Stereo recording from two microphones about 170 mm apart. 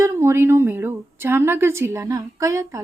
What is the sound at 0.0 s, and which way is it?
A woman's voice, 15° right (ahead or behind).